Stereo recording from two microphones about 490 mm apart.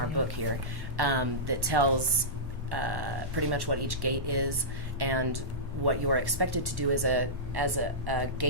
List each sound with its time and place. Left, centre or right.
0.9 s speech: right